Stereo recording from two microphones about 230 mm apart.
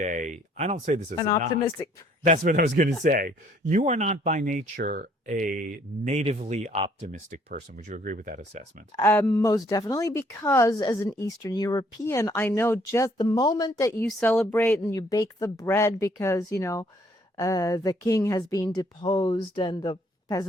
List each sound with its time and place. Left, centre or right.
0.0 s speech: right
1.1 s speech: centre
2.2 s speech: right
9.0 s speech: centre